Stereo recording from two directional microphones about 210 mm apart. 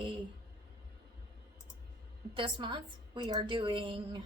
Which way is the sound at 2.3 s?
25° right (ahead or behind).